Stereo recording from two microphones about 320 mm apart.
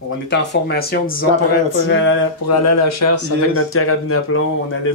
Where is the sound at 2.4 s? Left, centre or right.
Left.